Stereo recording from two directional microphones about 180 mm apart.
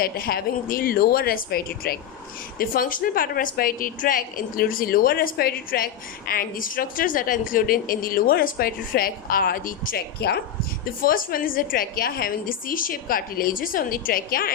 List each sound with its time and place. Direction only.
0.0 s a woman's voice: 55° left (ahead or behind)
10.8 s a woman's voice: 50° left (ahead or behind)